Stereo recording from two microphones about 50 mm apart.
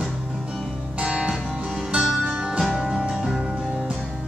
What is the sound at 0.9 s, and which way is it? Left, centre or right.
Music, right.